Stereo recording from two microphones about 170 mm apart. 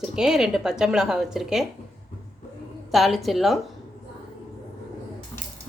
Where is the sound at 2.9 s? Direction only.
Centre (ahead or behind).